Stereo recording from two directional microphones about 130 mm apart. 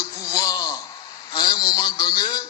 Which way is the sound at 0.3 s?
25° left (ahead or behind).